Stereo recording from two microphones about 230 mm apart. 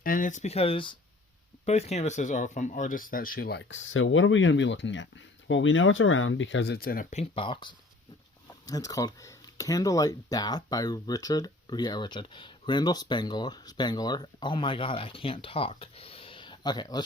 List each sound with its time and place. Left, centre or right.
0.0 s speech: left; by 17.0 s centre